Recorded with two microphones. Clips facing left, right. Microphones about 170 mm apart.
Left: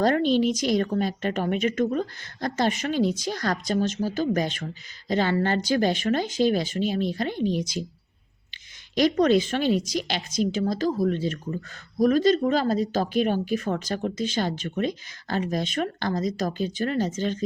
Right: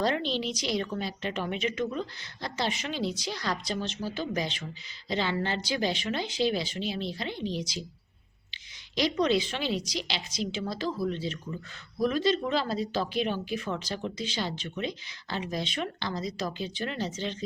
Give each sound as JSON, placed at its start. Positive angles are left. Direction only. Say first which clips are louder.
{"t": 0.0, "sound": "a woman's voice", "louder": "left 8 dB", "side_deg": 50}
{"t": 9.0, "sound": "a woman's voice", "louder": "left 6 dB", "side_deg": 50}